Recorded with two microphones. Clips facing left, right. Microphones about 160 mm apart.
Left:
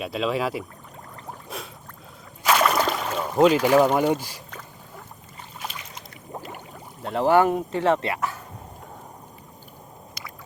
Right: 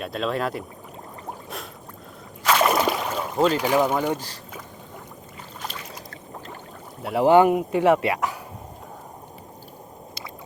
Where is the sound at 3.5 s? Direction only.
15° right (ahead or behind).